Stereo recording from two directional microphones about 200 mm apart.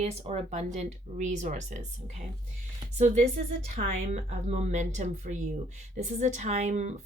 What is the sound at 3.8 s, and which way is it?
Speech, 40° right (ahead or behind).